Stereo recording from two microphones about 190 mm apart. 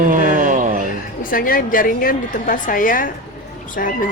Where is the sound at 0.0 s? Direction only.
45° right (ahead or behind).